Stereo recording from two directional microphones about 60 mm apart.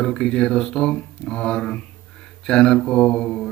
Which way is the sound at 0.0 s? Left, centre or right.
Centre.